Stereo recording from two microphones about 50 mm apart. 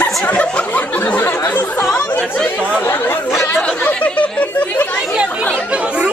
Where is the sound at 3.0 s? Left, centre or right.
Left.